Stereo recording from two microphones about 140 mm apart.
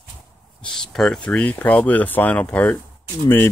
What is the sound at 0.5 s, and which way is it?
Speech, 5° left (ahead or behind).